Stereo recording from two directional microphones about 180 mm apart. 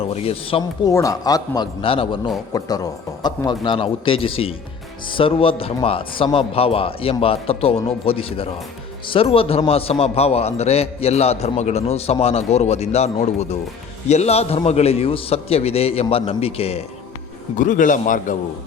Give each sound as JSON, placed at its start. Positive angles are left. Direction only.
{"t": 0.0, "sound": "speech", "side_deg": 30}
{"t": 0.9, "sound": "a man's voice", "side_deg": 20}
{"t": 17.6, "sound": "a man's voice", "side_deg": 45}